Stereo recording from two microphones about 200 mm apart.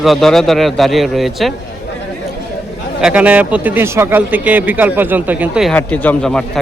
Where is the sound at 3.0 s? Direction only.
5° right (ahead or behind).